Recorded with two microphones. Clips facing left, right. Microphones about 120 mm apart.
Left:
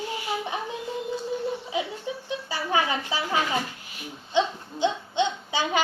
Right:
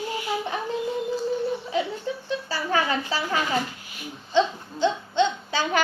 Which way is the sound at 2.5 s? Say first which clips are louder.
Even; 15° left (ahead or behind).